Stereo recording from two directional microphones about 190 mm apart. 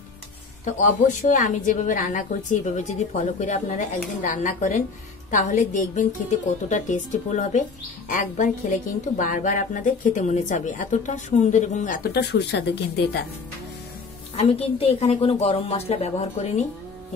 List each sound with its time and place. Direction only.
0.7 s a woman's voice: 40° left (ahead or behind); by 13.2 s 60° left (ahead or behind)
14.3 s a woman's voice: 30° left (ahead or behind)